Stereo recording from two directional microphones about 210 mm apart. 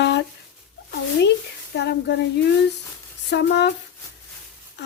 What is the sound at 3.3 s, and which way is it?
Speech, 55° left (ahead or behind).